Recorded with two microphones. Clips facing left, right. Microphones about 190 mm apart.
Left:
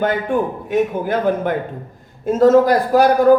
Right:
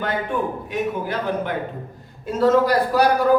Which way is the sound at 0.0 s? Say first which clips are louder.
Left 6 dB; 50° left (ahead or behind).